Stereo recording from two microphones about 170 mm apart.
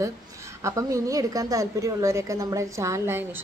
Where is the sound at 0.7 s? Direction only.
20° right (ahead or behind).